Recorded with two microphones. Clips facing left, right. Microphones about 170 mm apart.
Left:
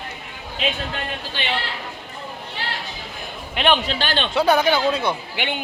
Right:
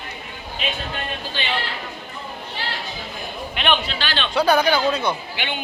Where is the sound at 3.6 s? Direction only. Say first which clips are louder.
Left 3 dB; 30° left (ahead or behind).